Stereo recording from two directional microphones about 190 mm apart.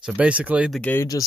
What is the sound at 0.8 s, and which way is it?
Speech, 15° left (ahead or behind).